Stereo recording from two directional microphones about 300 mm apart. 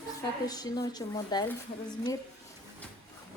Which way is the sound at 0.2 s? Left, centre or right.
Centre.